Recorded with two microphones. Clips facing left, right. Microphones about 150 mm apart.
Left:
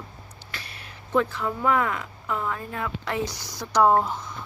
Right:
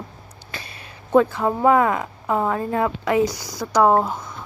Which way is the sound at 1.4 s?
35° right (ahead or behind).